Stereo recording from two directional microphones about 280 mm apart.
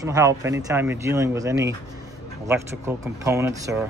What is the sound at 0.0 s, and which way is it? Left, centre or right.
Speech, centre.